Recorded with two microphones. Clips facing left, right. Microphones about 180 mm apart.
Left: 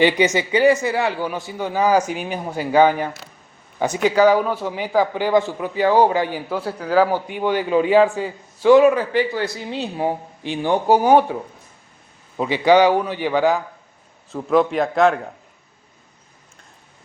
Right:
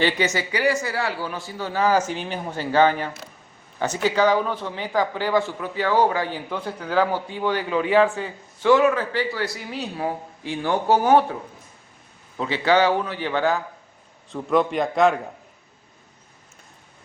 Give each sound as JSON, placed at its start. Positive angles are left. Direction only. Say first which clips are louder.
{"t": 0.0, "sound": "a man's voice", "louder": "left 5 dB", "side_deg": 15}
{"t": 12.4, "sound": "a man's voice", "louder": "left 5 dB", "side_deg": 15}
{"t": 14.3, "sound": "a man's voice", "louder": "left 3 dB", "side_deg": 0}